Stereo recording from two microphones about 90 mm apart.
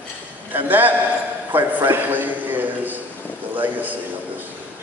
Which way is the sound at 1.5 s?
20° right (ahead or behind).